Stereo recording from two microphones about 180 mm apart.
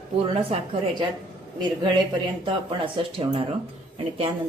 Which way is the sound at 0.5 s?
35° right (ahead or behind).